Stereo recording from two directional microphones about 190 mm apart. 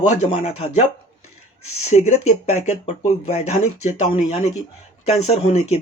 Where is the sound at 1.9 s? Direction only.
35° left (ahead or behind).